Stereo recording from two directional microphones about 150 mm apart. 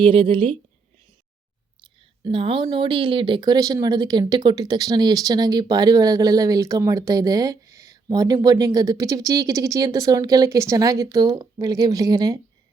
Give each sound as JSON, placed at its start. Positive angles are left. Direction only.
{"t": 0.0, "sound": "a woman's voice", "side_deg": -35}
{"t": 2.0, "sound": "speech", "side_deg": -35}